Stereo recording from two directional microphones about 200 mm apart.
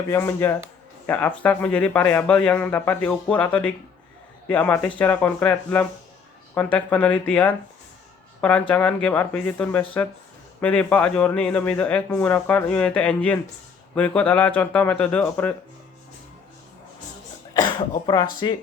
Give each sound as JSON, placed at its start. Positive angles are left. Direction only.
{"t": 0.1, "sound": "a man's voice", "side_deg": 10}
{"t": 17.5, "sound": "speech", "side_deg": 20}